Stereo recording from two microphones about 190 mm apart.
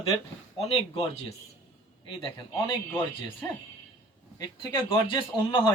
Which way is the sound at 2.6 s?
20° left (ahead or behind).